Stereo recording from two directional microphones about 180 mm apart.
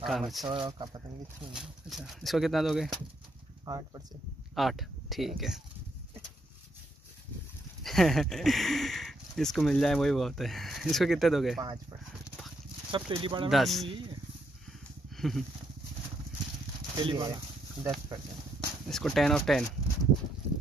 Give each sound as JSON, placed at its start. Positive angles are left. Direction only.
{"t": 0.0, "sound": "speech", "side_deg": 0}
{"t": 0.5, "sound": "speech", "side_deg": -25}
{"t": 1.5, "sound": "speech", "side_deg": 0}
{"t": 3.6, "sound": "speech", "side_deg": -20}
{"t": 4.6, "sound": "speech", "side_deg": 0}
{"t": 7.8, "sound": "speech", "side_deg": 0}
{"t": 12.9, "sound": "speech", "side_deg": -30}
{"t": 13.5, "sound": "speech", "side_deg": 0}
{"t": 13.8, "sound": "speech", "side_deg": -30}
{"t": 15.1, "sound": "a sound", "side_deg": 0}
{"t": 16.9, "sound": "speech", "side_deg": -25}
{"t": 18.9, "sound": "speech", "side_deg": 0}